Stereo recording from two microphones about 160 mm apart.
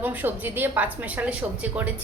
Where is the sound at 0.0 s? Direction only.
10° right (ahead or behind).